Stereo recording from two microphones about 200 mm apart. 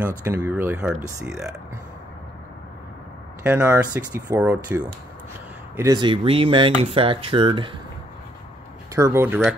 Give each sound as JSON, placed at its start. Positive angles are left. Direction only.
{"t": 0.2, "sound": "speech", "side_deg": -10}
{"t": 3.4, "sound": "speech", "side_deg": -10}
{"t": 5.8, "sound": "speech", "side_deg": -20}
{"t": 8.9, "sound": "speech", "side_deg": -15}